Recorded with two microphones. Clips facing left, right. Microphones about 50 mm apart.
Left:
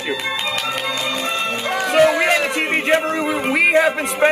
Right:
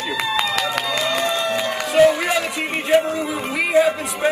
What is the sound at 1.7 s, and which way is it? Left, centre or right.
Music, left.